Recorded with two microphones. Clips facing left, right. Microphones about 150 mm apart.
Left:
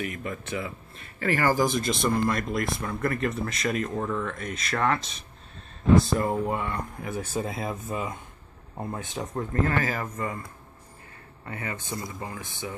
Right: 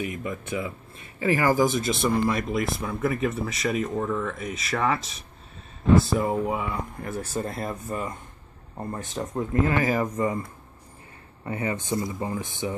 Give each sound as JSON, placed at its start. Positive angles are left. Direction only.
{"t": 0.0, "sound": "speech", "side_deg": -15}
{"t": 9.4, "sound": "speech", "side_deg": -15}
{"t": 11.4, "sound": "speech", "side_deg": -20}